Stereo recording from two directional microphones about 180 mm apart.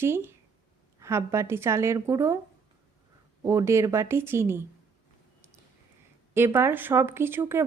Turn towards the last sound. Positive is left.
turn(degrees=-15)  # may be behind; listen again after turning